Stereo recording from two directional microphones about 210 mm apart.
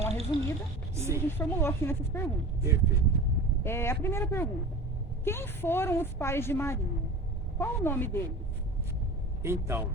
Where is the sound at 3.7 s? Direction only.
10° left (ahead or behind).